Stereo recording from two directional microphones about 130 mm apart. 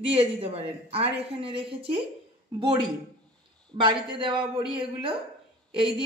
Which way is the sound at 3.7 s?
40° right (ahead or behind).